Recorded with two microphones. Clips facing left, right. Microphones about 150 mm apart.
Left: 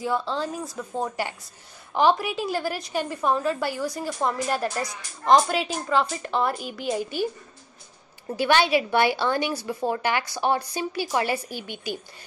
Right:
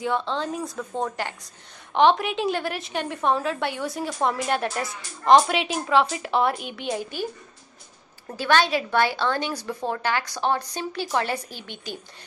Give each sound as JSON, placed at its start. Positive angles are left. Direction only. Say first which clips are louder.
{"t": 0.0, "sound": "a woman's voice", "louder": "even", "side_deg": 5}
{"t": 7.0, "sound": "a woman's voice", "louder": "left 3 dB", "side_deg": 50}
{"t": 8.4, "sound": "a woman's voice", "louder": "left 1 dB", "side_deg": 15}